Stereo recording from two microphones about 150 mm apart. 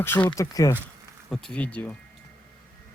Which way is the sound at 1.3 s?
5° left (ahead or behind).